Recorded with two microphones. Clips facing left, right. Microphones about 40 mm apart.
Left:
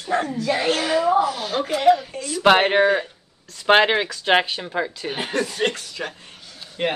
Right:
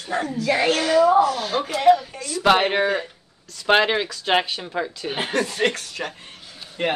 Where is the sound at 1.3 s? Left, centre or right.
Centre.